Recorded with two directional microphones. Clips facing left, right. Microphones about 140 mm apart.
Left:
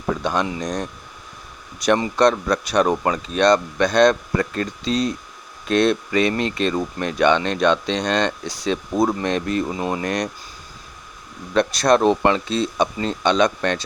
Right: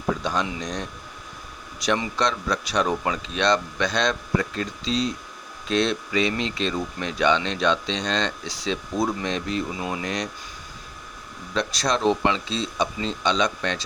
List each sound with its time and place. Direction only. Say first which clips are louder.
0.4 s speech: left 5 dB; 45° left (ahead or behind)
11.5 s speech: left 8 dB; 55° left (ahead or behind)